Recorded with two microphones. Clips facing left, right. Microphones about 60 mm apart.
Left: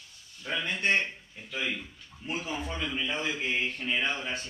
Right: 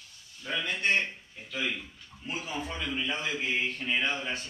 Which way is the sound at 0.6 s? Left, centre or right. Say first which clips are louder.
Left 1 dB; left.